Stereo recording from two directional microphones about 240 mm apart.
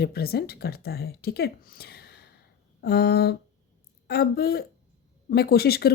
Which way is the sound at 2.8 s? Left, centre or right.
Left.